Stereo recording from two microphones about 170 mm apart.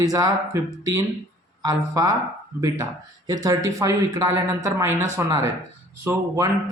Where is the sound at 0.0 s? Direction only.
20° right (ahead or behind).